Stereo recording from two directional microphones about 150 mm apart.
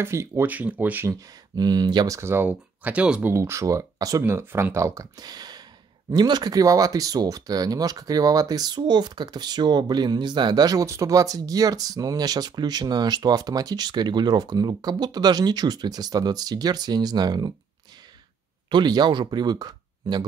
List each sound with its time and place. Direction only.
0.0 s speech: 15° right (ahead or behind)
1.5 s speech: 25° right (ahead or behind)
18.7 s speech: 30° right (ahead or behind)